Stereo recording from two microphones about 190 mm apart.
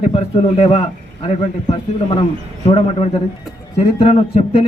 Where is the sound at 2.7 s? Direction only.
30° left (ahead or behind).